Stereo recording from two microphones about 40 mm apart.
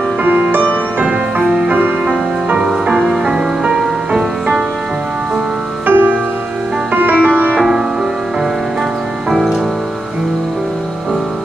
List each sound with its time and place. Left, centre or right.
0.2 s music: right
0.9 s music: right
2.6 s music: centre
5.9 s music: right
9.3 s music: centre